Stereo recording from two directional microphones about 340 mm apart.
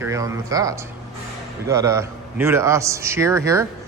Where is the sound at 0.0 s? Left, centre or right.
Centre.